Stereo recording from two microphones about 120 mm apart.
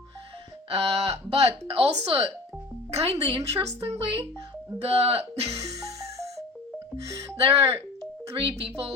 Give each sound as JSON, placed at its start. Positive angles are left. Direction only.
{"t": 0.7, "sound": "speech", "side_deg": -60}
{"t": 5.5, "sound": "music", "side_deg": -25}
{"t": 7.0, "sound": "speech", "side_deg": -25}
{"t": 7.3, "sound": "a woman's voice", "side_deg": -55}